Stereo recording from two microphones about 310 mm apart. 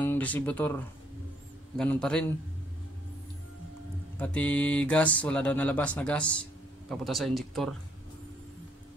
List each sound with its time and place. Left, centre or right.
0.0 s speech: centre
4.2 s speech: centre